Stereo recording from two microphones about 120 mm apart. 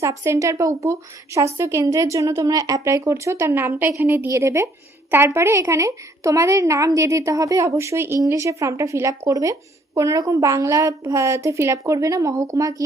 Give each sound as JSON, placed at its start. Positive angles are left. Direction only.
{"t": 0.0, "sound": "a woman's voice", "side_deg": -25}